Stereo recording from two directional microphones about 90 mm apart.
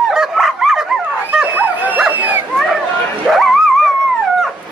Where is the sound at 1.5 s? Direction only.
15° right (ahead or behind).